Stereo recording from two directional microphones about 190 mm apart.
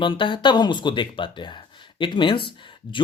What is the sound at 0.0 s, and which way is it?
Speech, 25° left (ahead or behind).